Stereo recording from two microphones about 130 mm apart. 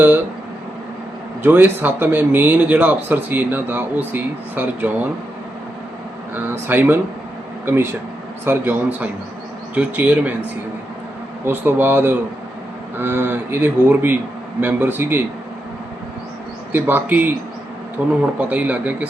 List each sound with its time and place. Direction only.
1.4 s speech: 15° right (ahead or behind)
6.3 s speech: 15° right (ahead or behind)
11.4 s speech: 15° right (ahead or behind)
16.7 s speech: 15° right (ahead or behind)